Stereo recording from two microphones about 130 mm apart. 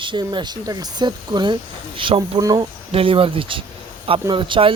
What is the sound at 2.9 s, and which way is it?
Speech, 45° right (ahead or behind).